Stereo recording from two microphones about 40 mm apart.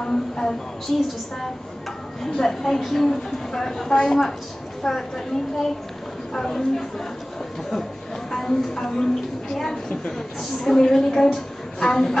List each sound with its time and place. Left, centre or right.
0.0 s music: centre
0.9 s a woman's voice: centre
2.3 s a woman's voice: centre
8.3 s a woman's voice: centre